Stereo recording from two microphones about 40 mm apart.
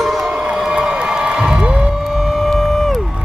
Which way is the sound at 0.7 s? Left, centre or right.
Centre.